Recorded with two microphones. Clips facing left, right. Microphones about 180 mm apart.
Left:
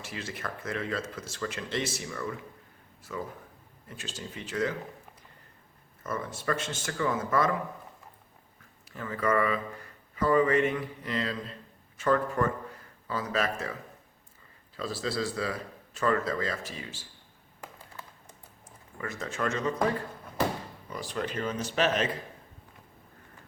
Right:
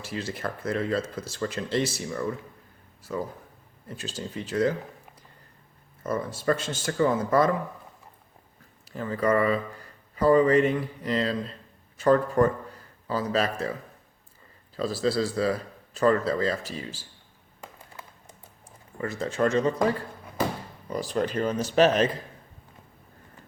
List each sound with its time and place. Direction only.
0.0 s speech: 35° right (ahead or behind)
6.0 s speech: 35° right (ahead or behind)
8.8 s speech: 35° right (ahead or behind)
14.8 s speech: 35° right (ahead or behind)
18.9 s speech: 35° right (ahead or behind)
20.9 s speech: 40° right (ahead or behind)